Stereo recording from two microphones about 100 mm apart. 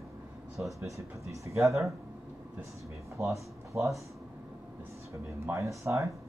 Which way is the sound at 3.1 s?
30° right (ahead or behind).